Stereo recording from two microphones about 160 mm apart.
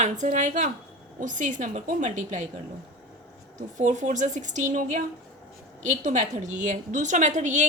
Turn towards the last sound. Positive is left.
turn(degrees=-50)  # may be behind; listen again after turning